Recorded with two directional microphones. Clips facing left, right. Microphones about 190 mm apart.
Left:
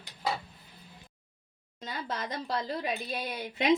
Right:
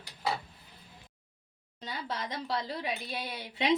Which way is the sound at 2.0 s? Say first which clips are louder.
Even; 50° left (ahead or behind).